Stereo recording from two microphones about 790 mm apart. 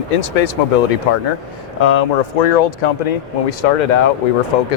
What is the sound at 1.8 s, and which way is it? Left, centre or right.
Speech, left.